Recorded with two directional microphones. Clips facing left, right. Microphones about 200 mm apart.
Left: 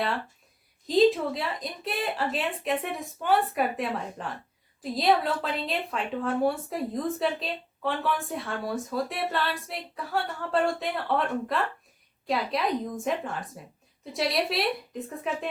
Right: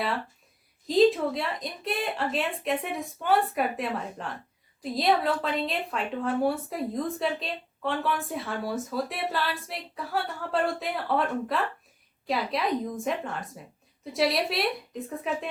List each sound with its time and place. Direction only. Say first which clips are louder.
0.9 s a woman's voice: even; centre (ahead or behind)